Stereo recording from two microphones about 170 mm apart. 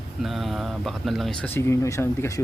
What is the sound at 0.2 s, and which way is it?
Speech, centre (ahead or behind).